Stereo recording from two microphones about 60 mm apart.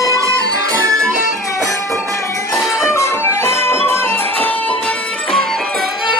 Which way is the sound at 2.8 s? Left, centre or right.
Left.